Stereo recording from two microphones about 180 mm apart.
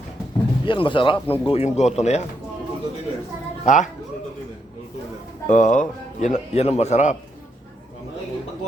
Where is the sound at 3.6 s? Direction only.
45° left (ahead or behind).